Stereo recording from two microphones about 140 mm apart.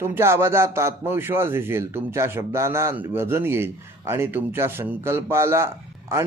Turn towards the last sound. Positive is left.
turn(degrees=-20)  # may be behind; listen again after turning